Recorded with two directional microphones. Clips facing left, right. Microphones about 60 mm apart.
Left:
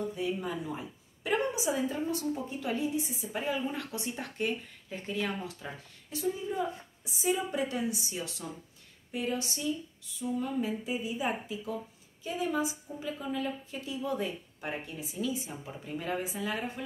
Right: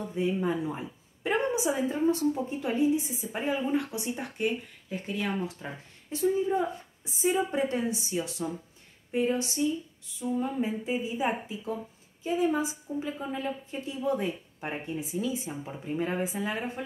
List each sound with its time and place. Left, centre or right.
0.1 s a woman's voice: right; by 5.3 s centre
5.4 s a woman's voice: right
8.4 s a woman's voice: centre
9.1 s a woman's voice: right